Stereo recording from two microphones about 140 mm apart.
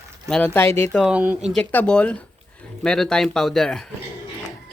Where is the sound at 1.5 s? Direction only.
10° left (ahead or behind).